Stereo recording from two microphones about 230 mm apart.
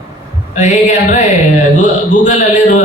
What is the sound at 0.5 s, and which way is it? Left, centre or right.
Speech, left.